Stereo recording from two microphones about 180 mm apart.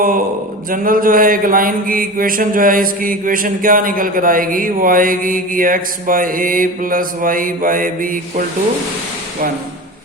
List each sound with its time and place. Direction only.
0.7 s mantra: 50° right (ahead or behind)